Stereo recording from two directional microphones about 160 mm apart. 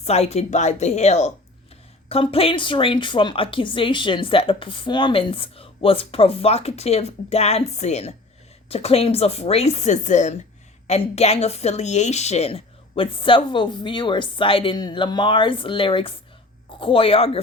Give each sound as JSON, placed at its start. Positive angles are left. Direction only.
{"t": 0.0, "sound": "a woman's voice", "side_deg": 40}